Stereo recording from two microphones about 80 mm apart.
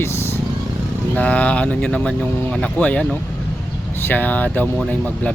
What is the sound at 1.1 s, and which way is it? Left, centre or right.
Speech, centre.